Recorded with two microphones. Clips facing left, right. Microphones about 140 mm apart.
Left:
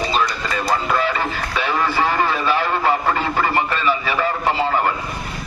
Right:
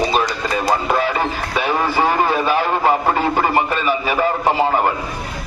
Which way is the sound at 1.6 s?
10° right (ahead or behind).